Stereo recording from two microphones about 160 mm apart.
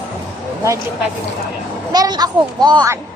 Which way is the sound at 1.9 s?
25° right (ahead or behind).